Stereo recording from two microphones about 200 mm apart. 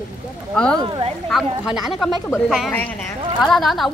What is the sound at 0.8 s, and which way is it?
Speech, 25° right (ahead or behind).